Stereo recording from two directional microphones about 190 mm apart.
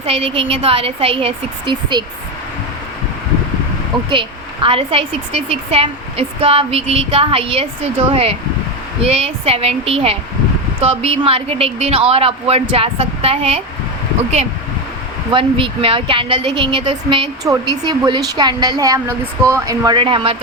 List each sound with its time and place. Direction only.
0.0 s a woman's voice: 30° right (ahead or behind)
4.1 s a woman's voice: 25° right (ahead or behind)
15.3 s a woman's voice: 25° right (ahead or behind)